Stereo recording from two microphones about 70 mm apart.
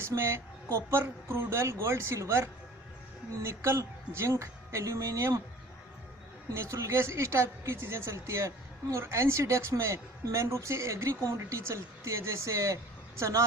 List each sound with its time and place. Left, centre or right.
0.0 s a woman's voice: right
6.5 s a woman's voice: right